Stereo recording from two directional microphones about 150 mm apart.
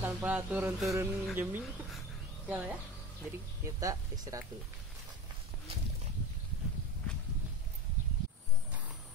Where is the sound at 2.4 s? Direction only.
10° right (ahead or behind).